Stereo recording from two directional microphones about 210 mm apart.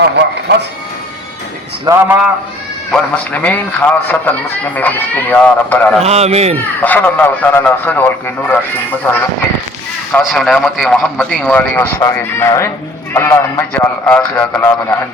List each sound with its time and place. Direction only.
0.0 s speech: 55° right (ahead or behind)
1.8 s a man's voice: 15° right (ahead or behind)
2.9 s a man's voice: 5° left (ahead or behind)
6.0 s speech: 30° right (ahead or behind)
6.8 s a man's voice: 10° left (ahead or behind)
10.2 s a man's voice: centre (ahead or behind)